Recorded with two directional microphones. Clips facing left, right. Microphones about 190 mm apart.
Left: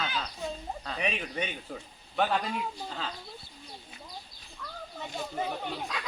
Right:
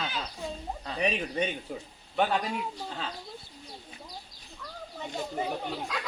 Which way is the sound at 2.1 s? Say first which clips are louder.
Right 1 dB; 10° right (ahead or behind).